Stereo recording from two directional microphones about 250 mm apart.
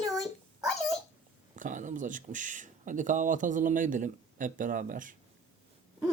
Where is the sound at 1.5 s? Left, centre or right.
Right.